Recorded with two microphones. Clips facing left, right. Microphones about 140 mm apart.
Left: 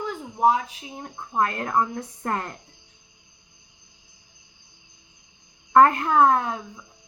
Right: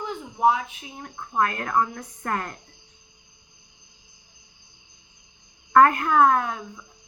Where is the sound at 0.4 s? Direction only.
35° left (ahead or behind).